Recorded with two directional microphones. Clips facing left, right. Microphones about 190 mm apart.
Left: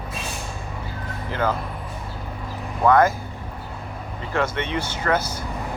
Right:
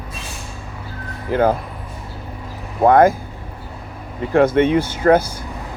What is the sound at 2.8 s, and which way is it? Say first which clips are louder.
Speech: right 5 dB; 50° right (ahead or behind).